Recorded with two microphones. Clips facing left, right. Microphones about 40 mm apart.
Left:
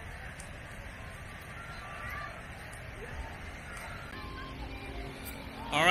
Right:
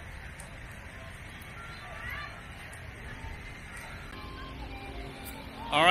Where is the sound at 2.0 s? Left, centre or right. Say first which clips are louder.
Right 2 dB; right.